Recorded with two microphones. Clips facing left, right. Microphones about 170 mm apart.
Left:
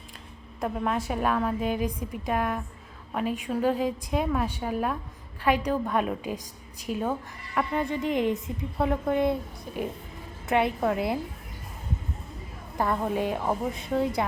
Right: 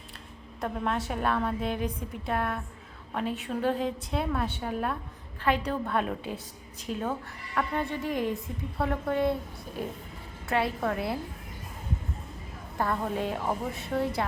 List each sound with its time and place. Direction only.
0.6 s a woman's voice: 10° left (ahead or behind)
10.4 s a woman's voice: 20° left (ahead or behind)
12.7 s a woman's voice: 15° left (ahead or behind)